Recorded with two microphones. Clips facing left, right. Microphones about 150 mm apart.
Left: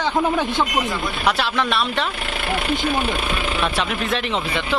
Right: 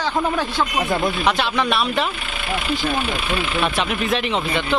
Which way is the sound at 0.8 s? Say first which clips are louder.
Right 5 dB; 50° right (ahead or behind).